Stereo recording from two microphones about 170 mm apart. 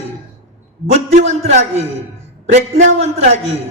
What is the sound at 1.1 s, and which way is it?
A man's voice, 40° right (ahead or behind).